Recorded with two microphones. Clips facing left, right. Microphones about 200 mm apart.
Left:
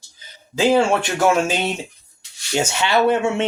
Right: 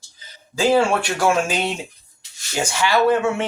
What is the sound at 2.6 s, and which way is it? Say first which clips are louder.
Speech: right 1 dB; 25° left (ahead or behind).